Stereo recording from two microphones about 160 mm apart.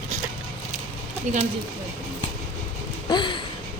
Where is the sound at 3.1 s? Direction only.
30° left (ahead or behind).